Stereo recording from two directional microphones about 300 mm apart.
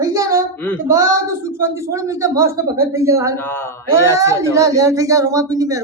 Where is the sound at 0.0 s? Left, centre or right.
Centre.